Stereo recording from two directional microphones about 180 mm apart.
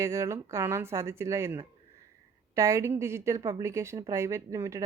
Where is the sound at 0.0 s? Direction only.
15° right (ahead or behind).